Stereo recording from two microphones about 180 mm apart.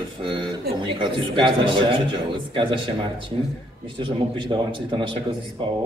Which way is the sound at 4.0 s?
25° right (ahead or behind).